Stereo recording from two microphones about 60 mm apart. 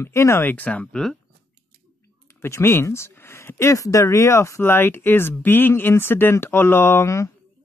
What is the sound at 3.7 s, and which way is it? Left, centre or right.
Speech, left.